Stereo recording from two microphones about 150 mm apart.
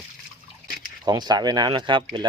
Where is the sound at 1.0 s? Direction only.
25° right (ahead or behind).